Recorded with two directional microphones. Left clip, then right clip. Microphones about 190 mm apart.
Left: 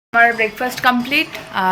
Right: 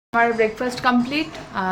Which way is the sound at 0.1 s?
5° right (ahead or behind).